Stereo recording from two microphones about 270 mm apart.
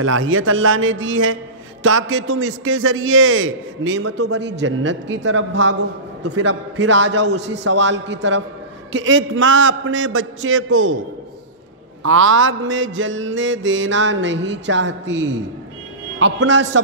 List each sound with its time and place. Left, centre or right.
0.0 s a man's voice: right
4.3 s a man's voice: right
12.0 s a man's voice: right